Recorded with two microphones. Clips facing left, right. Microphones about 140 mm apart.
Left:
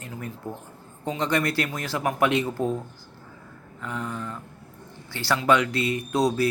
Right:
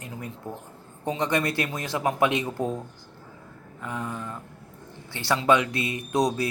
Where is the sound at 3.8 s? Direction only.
20° right (ahead or behind).